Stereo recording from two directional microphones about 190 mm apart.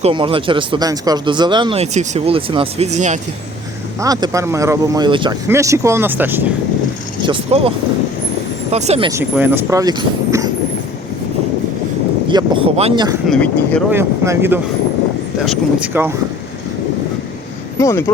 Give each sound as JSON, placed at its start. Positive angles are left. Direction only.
{"t": 0.0, "sound": "speech", "side_deg": -25}
{"t": 4.0, "sound": "speech", "side_deg": -20}
{"t": 7.2, "sound": "speech", "side_deg": -25}
{"t": 8.7, "sound": "speech", "side_deg": -35}
{"t": 9.3, "sound": "speech", "side_deg": -15}
{"t": 12.3, "sound": "speech", "side_deg": -25}
{"t": 13.2, "sound": "speech", "side_deg": 5}
{"t": 13.9, "sound": "speech", "side_deg": -10}
{"t": 17.7, "sound": "speech", "side_deg": 15}